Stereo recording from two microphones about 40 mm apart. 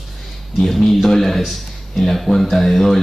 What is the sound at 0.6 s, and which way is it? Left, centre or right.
Speech, centre.